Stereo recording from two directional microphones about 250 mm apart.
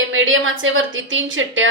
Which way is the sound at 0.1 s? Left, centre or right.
Right.